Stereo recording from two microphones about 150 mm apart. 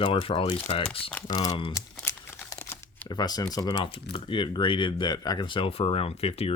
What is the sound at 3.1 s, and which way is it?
Speech, 25° left (ahead or behind).